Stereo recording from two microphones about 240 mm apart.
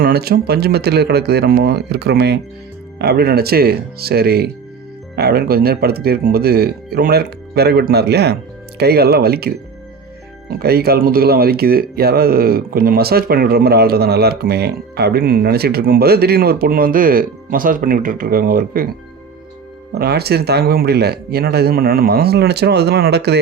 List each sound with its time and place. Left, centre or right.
0.0 s speech: right
10.6 s speech: right
19.9 s speech: right